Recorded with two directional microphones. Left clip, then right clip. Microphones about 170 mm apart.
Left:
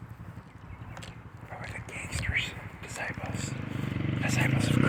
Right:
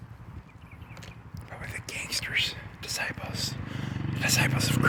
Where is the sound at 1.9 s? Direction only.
70° right (ahead or behind).